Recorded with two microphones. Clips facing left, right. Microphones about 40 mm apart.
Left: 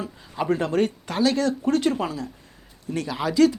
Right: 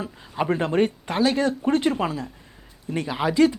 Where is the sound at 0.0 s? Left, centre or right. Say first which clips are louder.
Right 1 dB; right.